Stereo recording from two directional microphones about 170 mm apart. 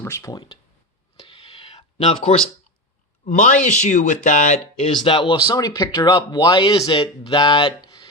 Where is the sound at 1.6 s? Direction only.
35° left (ahead or behind).